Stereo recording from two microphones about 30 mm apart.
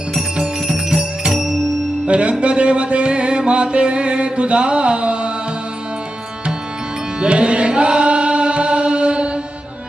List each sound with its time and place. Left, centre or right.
0.7 s music: centre
2.0 s music: right
7.2 s music: right